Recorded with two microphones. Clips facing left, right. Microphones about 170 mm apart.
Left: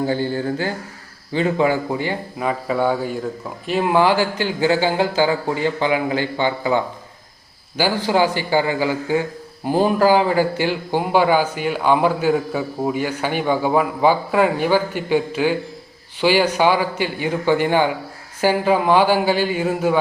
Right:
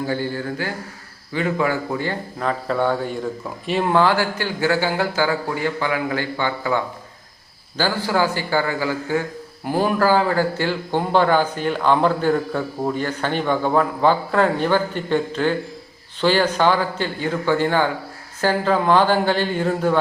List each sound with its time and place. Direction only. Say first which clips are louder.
0.1 s a man's voice: left 3 dB; 25° left (ahead or behind); by 3.9 s centre (ahead or behind)
3.9 s a man's voice: left 2 dB; 15° left (ahead or behind)